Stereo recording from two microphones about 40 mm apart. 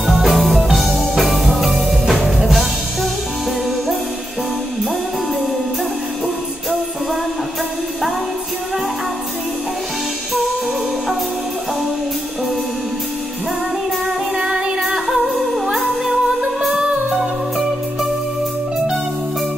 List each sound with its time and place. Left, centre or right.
0.0 s music: centre
14.0 s music: centre
15.0 s music: centre